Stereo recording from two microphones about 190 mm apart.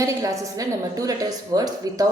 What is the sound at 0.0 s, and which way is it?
A woman's voice, 15° right (ahead or behind).